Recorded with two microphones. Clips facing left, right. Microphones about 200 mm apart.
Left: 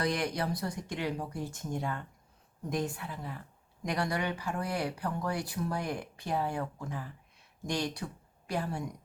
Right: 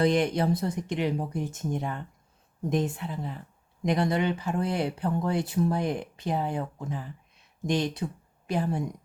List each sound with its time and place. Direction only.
0.0 s speech: 25° right (ahead or behind)